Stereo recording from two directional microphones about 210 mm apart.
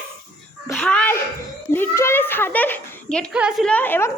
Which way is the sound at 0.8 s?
5° left (ahead or behind).